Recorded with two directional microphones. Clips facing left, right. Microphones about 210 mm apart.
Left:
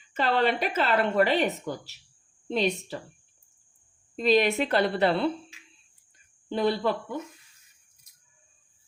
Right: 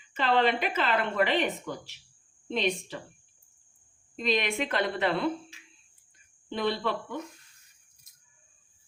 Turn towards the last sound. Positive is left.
turn(degrees=40)  # may be behind; listen again after turning